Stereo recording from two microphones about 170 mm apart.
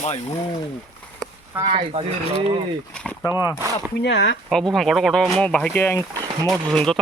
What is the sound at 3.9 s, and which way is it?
Speech, 90° left.